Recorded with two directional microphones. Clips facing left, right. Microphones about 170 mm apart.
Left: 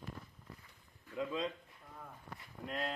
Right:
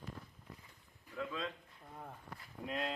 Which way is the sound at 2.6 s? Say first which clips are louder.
Even; centre (ahead or behind).